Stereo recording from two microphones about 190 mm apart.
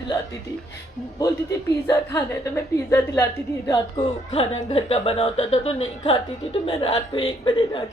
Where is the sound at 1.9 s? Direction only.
15° left (ahead or behind).